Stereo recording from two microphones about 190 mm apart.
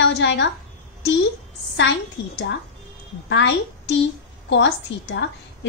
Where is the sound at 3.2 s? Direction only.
70° left (ahead or behind).